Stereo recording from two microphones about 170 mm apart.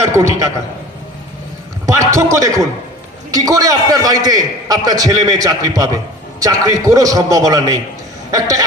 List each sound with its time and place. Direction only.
0.2 s a man's voice: 20° right (ahead or behind)
1.9 s a man's voice: 20° right (ahead or behind)